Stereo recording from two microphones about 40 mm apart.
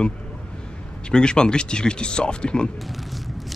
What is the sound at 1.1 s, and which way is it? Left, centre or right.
Speech, left.